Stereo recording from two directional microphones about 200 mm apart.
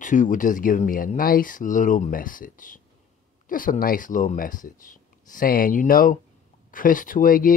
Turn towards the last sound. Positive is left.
turn(degrees=45)  # may be behind; listen again after turning